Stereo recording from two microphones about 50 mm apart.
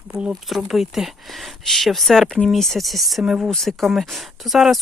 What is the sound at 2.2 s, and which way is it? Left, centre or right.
Speech, centre.